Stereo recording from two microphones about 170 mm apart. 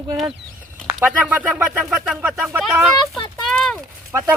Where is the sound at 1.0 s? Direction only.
10° right (ahead or behind).